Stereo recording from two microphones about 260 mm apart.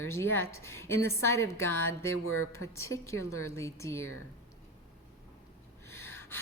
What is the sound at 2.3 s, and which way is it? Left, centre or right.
Speech, left.